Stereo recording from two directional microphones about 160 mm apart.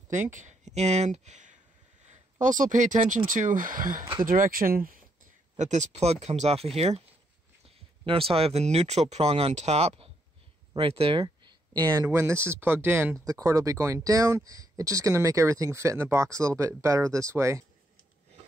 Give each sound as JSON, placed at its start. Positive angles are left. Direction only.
{"t": 0.1, "sound": "speech", "side_deg": -50}
{"t": 5.6, "sound": "speech", "side_deg": -50}